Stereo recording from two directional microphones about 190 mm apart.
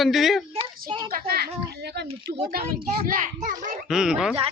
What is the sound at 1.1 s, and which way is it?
A child's voice, 55° right (ahead or behind).